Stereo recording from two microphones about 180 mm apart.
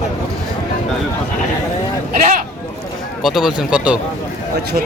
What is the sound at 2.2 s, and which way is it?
Sheep, 45° right (ahead or behind).